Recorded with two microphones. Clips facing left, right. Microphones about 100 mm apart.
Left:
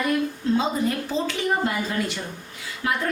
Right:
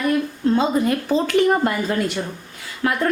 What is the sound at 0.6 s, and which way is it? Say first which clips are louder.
A woman's voice: right 5 dB; 60° right (ahead or behind).